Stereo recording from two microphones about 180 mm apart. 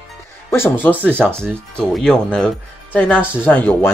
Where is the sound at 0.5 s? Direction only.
10° left (ahead or behind).